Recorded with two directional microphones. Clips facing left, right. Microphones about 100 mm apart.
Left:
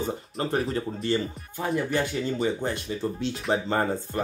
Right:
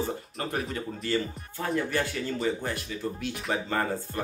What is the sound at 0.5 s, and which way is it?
Speech, 30° left (ahead or behind).